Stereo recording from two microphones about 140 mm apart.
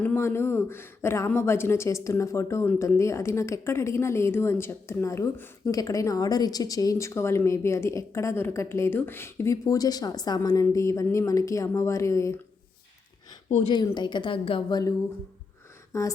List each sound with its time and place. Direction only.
0.0 s speech: 15° left (ahead or behind)
13.7 s a woman's voice: 30° left (ahead or behind)
15.9 s speech: 20° left (ahead or behind)